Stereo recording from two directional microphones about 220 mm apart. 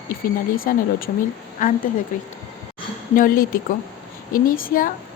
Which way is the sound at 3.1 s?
40° left (ahead or behind).